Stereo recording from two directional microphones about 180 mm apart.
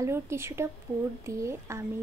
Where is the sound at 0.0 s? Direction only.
15° right (ahead or behind).